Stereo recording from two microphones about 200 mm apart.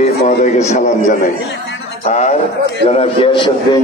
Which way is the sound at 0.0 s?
35° left (ahead or behind).